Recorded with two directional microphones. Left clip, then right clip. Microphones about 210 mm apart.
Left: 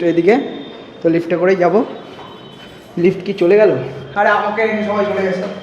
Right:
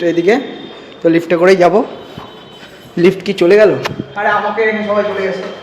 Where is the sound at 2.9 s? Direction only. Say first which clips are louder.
Right 4 dB; 15° right (ahead or behind).